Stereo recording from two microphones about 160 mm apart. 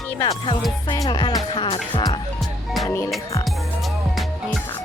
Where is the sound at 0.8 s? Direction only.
25° left (ahead or behind).